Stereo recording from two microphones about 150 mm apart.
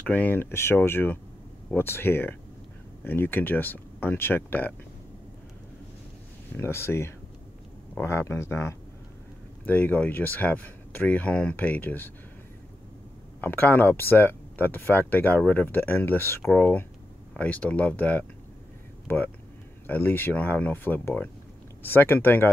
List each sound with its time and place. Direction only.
0.0 s speech: 10° left (ahead or behind)
6.5 s speech: 15° left (ahead or behind)
13.4 s speech: 15° left (ahead or behind)